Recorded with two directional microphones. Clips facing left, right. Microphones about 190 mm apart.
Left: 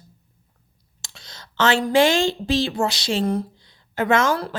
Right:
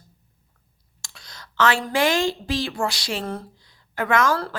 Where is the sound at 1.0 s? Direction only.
25° left (ahead or behind).